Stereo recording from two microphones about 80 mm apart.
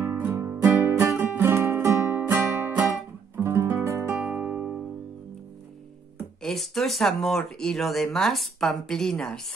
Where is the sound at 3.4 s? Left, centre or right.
Right.